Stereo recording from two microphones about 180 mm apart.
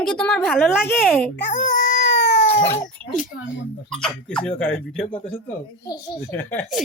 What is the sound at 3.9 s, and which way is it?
Speech, 5° left (ahead or behind).